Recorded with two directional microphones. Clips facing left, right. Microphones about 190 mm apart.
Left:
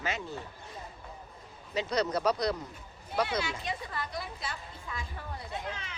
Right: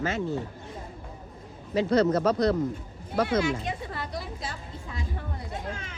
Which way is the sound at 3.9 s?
55° left (ahead or behind).